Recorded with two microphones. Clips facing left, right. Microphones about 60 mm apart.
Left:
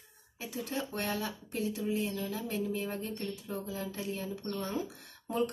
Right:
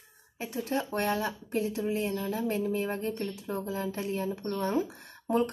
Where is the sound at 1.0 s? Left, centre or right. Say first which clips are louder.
Right 6 dB; right.